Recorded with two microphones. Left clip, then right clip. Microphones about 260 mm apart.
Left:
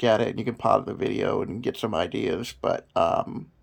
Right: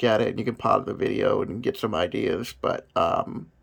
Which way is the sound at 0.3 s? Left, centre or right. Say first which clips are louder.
Even; right.